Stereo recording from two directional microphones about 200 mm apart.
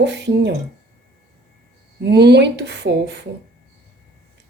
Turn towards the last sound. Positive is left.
turn(degrees=-60)  # may be behind; listen again after turning